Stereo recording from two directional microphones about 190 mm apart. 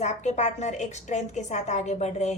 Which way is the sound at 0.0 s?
35° left (ahead or behind).